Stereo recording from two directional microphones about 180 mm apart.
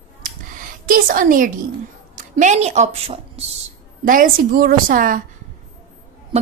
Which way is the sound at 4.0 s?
50° right (ahead or behind).